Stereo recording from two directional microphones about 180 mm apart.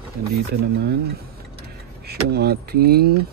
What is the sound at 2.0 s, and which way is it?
Speech, 60° right (ahead or behind).